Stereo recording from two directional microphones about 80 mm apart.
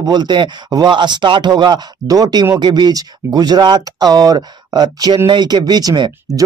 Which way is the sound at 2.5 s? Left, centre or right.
Right.